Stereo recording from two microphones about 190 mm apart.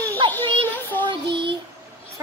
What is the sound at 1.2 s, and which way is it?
Child singing, 60° right (ahead or behind).